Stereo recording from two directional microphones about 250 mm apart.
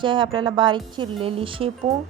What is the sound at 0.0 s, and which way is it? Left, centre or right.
A woman's voice, centre.